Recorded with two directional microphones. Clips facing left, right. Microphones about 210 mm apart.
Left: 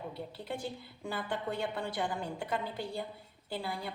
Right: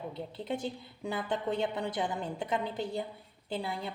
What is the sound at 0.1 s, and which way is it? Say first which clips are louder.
A woman's voice: right 4 dB; 20° right (ahead or behind).